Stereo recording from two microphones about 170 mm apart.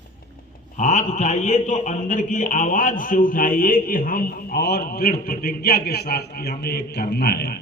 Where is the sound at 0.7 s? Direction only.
45° left (ahead or behind).